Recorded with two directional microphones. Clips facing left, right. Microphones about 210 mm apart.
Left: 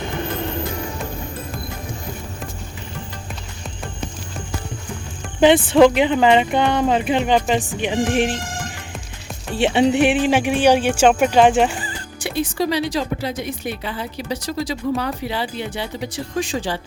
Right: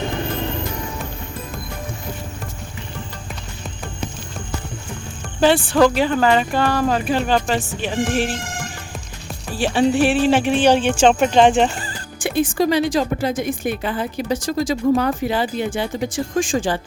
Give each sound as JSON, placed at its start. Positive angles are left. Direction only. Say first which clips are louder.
{"t": 5.4, "sound": "speech", "louder": "left 3 dB", "side_deg": 20}
{"t": 9.5, "sound": "speech", "louder": "left 1 dB", "side_deg": 20}
{"t": 12.2, "sound": "speech", "louder": "right 3 dB", "side_deg": -50}